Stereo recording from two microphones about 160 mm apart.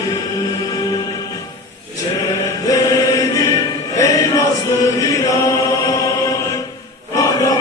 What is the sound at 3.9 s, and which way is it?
Chant, 20° left (ahead or behind).